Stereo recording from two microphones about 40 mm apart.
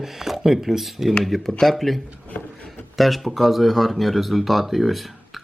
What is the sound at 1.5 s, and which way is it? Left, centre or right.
Speech, centre.